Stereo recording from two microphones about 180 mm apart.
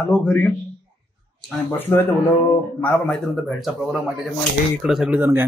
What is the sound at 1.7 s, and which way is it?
A man's voice, 10° left (ahead or behind).